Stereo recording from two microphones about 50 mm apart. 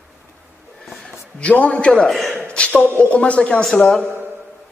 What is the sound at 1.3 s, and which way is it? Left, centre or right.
Speech, left.